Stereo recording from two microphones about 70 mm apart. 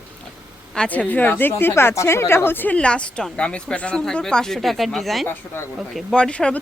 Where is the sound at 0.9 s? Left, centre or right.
Left.